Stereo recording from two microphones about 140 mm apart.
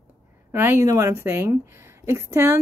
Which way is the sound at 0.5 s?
15° right (ahead or behind).